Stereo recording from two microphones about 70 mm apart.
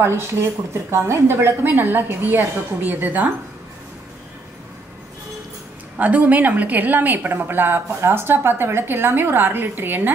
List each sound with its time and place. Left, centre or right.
0.0 s speech: right
5.9 s a woman's voice: right